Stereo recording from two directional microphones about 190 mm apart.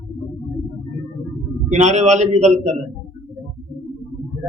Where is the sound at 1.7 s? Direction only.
35° right (ahead or behind).